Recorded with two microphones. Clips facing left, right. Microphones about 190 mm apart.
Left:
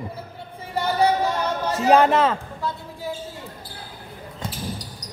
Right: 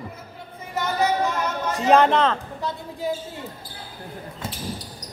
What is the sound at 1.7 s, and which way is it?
Speech, 5° left (ahead or behind).